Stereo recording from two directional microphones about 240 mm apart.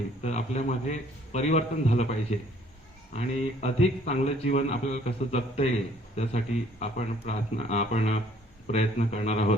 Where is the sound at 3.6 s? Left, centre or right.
Left.